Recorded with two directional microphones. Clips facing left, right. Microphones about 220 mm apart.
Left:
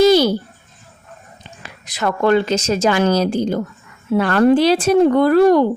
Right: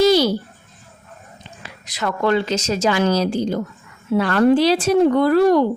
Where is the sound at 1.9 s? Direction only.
50° left (ahead or behind).